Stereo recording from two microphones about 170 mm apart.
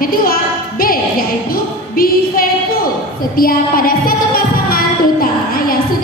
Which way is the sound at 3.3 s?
60° left (ahead or behind).